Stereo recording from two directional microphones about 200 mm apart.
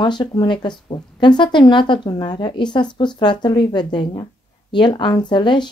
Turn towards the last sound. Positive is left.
turn(degrees=25)  # may be behind; listen again after turning